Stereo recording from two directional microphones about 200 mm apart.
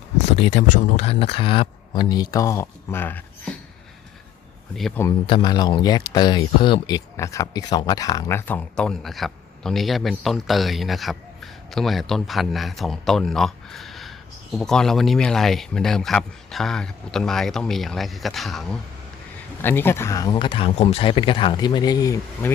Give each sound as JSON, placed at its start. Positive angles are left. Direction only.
{"t": 0.3, "sound": "speech", "side_deg": 30}
{"t": 4.7, "sound": "speech", "side_deg": 5}
{"t": 5.2, "sound": "speech", "side_deg": 25}